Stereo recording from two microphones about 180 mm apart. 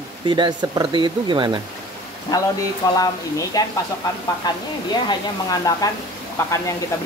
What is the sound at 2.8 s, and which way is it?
Speech, 15° left (ahead or behind).